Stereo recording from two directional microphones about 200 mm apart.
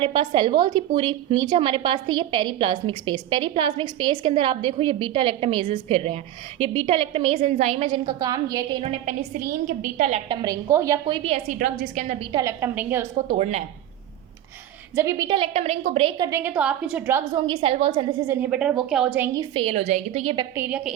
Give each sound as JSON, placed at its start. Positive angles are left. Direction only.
{"t": 0.0, "sound": "a woman's voice", "side_deg": -25}
{"t": 8.8, "sound": "a woman's voice", "side_deg": -30}
{"t": 10.2, "sound": "a woman's voice", "side_deg": -20}
{"t": 11.6, "sound": "a woman's voice", "side_deg": -40}
{"t": 12.2, "sound": "a woman's voice", "side_deg": -20}
{"t": 13.3, "sound": "a woman's voice", "side_deg": -35}
{"t": 14.9, "sound": "a woman's voice", "side_deg": -15}
{"t": 16.4, "sound": "a woman's voice", "side_deg": -5}
{"t": 17.4, "sound": "a woman's voice", "side_deg": -25}
{"t": 18.3, "sound": "a woman's voice", "side_deg": -10}
{"t": 20.6, "sound": "a woman's voice", "side_deg": -5}